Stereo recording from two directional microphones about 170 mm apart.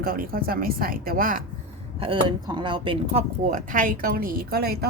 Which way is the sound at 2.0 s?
30° right (ahead or behind).